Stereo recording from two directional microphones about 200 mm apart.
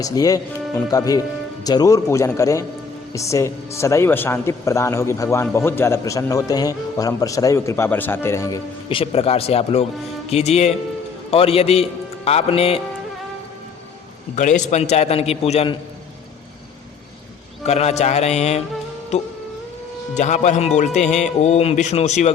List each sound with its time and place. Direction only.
0.0 s speech: 20° left (ahead or behind)
8.9 s a man's voice: 30° left (ahead or behind)
14.3 s a man's voice: 35° left (ahead or behind)
17.7 s a man's voice: 30° left (ahead or behind)